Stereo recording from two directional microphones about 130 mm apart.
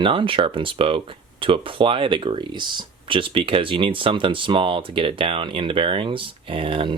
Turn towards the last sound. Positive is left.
turn(degrees=-45)  # may be behind; listen again after turning